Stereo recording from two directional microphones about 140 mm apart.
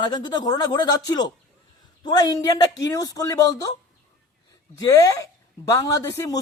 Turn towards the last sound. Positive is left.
turn(degrees=25)  # may be behind; listen again after turning